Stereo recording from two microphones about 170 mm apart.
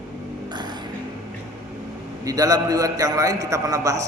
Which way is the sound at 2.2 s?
20° right (ahead or behind).